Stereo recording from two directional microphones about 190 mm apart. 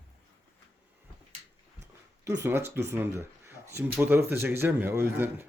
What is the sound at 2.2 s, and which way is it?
A man's voice, 15° right (ahead or behind).